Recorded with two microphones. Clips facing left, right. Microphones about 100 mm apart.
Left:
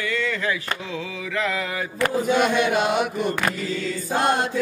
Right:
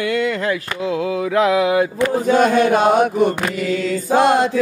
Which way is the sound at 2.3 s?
40° right (ahead or behind).